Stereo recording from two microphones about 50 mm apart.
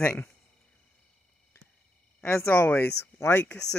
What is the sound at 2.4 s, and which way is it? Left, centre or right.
Speech, left.